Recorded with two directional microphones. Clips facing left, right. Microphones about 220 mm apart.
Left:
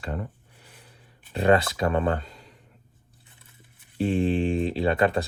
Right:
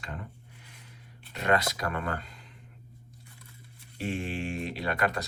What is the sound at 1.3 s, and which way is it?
Speech, 30° left (ahead or behind).